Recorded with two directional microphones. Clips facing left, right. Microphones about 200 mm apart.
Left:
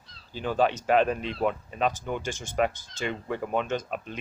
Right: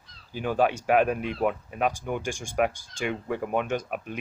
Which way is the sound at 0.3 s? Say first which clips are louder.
Right 1 dB; 10° right (ahead or behind).